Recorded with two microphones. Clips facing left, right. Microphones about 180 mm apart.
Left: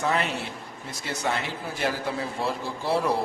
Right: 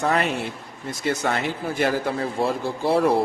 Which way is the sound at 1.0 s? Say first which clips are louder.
Right 5 dB; 55° right (ahead or behind).